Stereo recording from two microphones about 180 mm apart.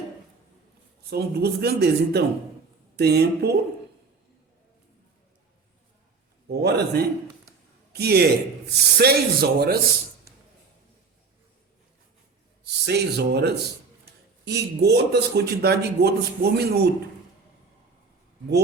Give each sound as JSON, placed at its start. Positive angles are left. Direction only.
{"t": 1.1, "sound": "a man's voice", "side_deg": -60}
{"t": 6.5, "sound": "a man's voice", "side_deg": -65}
{"t": 12.6, "sound": "a man's voice", "side_deg": -65}